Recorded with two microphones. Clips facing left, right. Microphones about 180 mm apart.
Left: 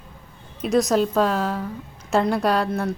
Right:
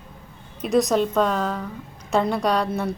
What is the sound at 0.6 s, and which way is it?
A woman's voice, centre (ahead or behind).